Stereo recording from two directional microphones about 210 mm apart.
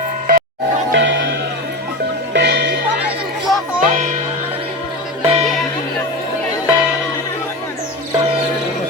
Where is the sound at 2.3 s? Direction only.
55° right (ahead or behind).